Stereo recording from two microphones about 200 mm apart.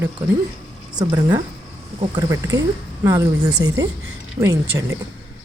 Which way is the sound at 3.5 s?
60° right (ahead or behind).